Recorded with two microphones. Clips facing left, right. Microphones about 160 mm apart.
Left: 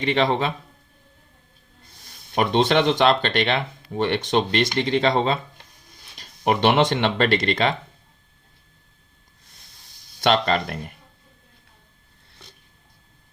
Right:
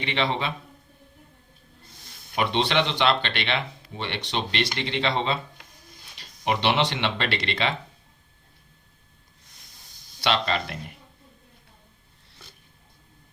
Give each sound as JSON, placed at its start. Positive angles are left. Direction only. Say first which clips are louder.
{"t": 0.0, "sound": "speech", "louder": "left 6 dB", "side_deg": 45}
{"t": 2.3, "sound": "speech", "louder": "left 5 dB", "side_deg": 45}
{"t": 10.2, "sound": "speech", "louder": "left 5 dB", "side_deg": 50}